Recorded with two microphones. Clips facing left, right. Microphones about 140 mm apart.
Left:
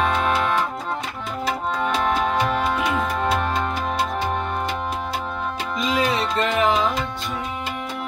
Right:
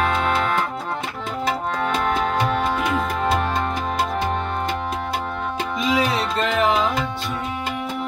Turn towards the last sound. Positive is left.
turn(degrees=0)  # may be behind; listen again after turning